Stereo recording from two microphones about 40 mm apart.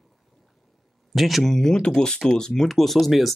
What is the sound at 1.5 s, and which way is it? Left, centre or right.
Speech, centre.